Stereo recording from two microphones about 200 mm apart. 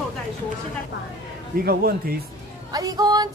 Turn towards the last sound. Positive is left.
turn(degrees=-20)  # may be behind; listen again after turning